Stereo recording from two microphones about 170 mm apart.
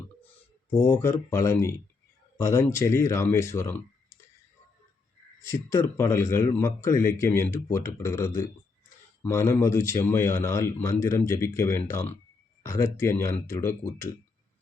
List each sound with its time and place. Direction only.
0.7 s speech: 15° left (ahead or behind)
5.5 s speech: 15° left (ahead or behind)